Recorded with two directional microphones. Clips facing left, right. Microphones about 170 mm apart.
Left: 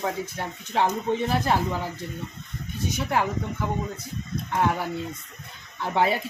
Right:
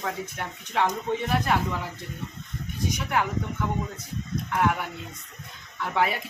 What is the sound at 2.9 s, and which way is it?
Speech, 30° left (ahead or behind).